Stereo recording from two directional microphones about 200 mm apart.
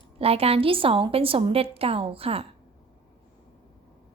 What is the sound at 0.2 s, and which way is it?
A woman's voice, 30° right (ahead or behind).